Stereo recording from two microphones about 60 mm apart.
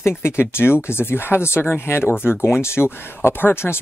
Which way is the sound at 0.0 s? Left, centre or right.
Left.